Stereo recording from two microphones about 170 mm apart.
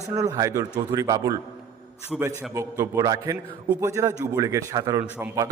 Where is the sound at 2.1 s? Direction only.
Centre (ahead or behind).